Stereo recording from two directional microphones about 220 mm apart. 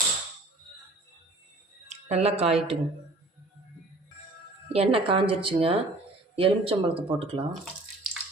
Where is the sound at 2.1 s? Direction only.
30° right (ahead or behind).